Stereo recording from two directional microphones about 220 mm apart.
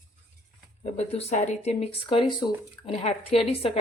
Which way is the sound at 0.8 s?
30° left (ahead or behind).